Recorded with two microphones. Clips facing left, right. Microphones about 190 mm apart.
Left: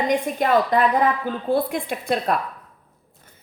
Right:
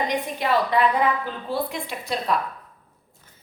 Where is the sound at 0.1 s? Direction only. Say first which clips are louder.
Left 4 dB; 50° left (ahead or behind).